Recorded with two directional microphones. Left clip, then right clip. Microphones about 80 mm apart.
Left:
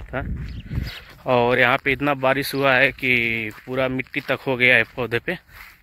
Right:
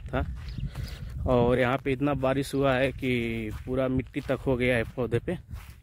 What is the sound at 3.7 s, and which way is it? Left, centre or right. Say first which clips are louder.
Speech: left 6 dB; right.